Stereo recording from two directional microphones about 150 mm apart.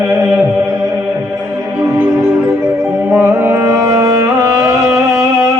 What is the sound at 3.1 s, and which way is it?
Music, 15° right (ahead or behind).